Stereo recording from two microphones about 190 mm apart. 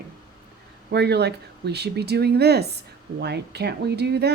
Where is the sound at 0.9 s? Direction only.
60° right (ahead or behind).